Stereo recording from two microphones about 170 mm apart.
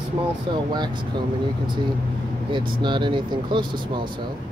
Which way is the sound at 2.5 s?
25° right (ahead or behind).